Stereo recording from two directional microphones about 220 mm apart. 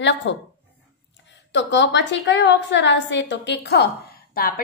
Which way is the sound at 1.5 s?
55° left (ahead or behind).